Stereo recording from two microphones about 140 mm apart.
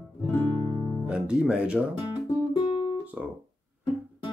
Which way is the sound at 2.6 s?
35° left (ahead or behind).